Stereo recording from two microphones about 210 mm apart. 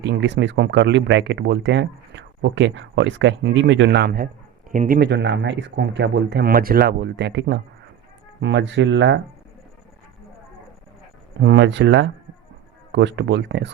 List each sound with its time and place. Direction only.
0.0 s speech: 55° right (ahead or behind)
11.3 s speech: 55° right (ahead or behind)